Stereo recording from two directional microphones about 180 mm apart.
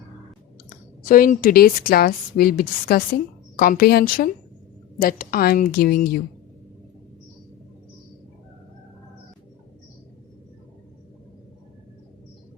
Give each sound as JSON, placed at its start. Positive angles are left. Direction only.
{"t": 1.0, "sound": "speech", "side_deg": 50}